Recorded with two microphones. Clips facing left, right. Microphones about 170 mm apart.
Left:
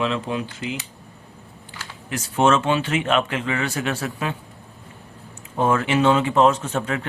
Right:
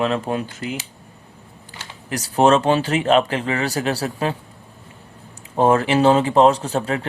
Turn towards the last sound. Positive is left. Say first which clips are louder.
# right 3 dB
turn(degrees=-35)  # may be behind; listen again after turning